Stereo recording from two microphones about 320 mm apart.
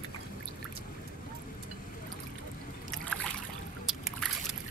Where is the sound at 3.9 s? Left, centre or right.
Centre.